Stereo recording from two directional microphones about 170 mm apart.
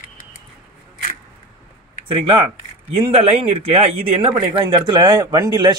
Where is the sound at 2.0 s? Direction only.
30° right (ahead or behind).